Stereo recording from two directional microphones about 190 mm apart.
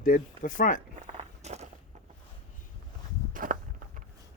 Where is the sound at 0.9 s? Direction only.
35° right (ahead or behind).